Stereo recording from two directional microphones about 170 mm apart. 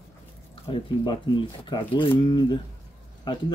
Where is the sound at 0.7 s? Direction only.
30° left (ahead or behind).